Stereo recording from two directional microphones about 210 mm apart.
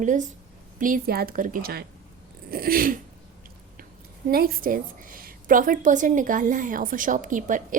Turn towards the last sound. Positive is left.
turn(degrees=-40)  # may be behind; listen again after turning